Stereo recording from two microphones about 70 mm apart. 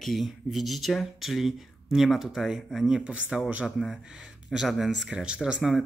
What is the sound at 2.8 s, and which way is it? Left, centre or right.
Speech, centre.